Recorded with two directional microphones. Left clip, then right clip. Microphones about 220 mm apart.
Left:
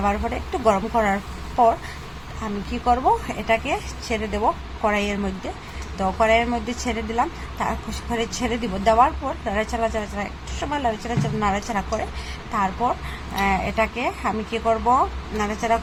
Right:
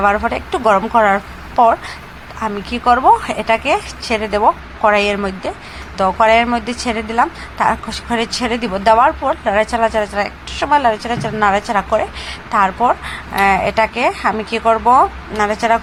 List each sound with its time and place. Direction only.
0.0 s a woman's voice: 10° right (ahead or behind)
2.8 s a woman's voice: 10° right (ahead or behind)